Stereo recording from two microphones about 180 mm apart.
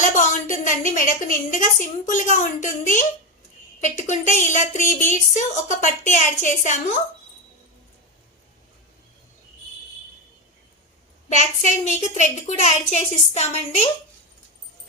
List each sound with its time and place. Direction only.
0.0 s a sound: 45° left (ahead or behind)
0.9 s a woman's voice: 45° left (ahead or behind)
11.3 s a woman's voice: 40° left (ahead or behind)